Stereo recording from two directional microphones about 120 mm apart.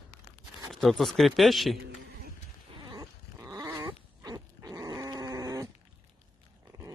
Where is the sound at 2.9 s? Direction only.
30° right (ahead or behind).